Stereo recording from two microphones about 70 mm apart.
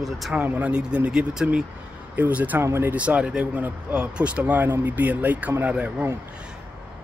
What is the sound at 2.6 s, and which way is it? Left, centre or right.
Speech, right.